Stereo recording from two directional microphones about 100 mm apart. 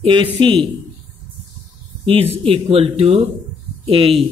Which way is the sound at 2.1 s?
70° right (ahead or behind).